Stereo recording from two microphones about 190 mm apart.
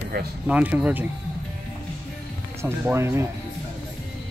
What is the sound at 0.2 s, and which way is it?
Speech, 55° right (ahead or behind).